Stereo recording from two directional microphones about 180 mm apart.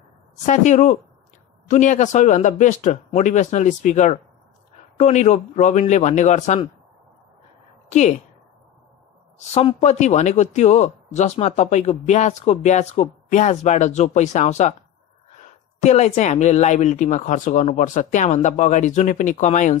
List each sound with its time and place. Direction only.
0.5 s speech: 40° left (ahead or behind)
7.9 s speech: 40° left (ahead or behind)
9.8 s speech: 40° left (ahead or behind)
15.8 s speech: 40° left (ahead or behind)